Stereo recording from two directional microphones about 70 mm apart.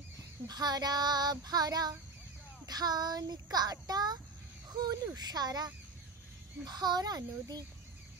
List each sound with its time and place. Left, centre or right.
0.5 s child singing: right
6.6 s child singing: right